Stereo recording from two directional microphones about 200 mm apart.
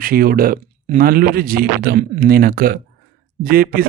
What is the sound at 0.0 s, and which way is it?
Speech, 45° right (ahead or behind).